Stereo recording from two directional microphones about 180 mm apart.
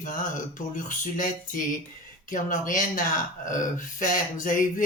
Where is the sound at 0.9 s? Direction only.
50° left (ahead or behind).